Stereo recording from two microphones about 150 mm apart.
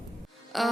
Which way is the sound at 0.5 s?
Centre (ahead or behind).